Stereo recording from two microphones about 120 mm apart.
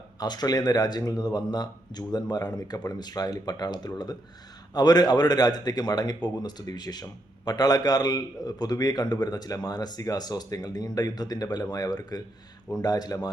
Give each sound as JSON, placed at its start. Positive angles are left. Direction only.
{"t": 0.2, "sound": "a man's voice", "side_deg": 35}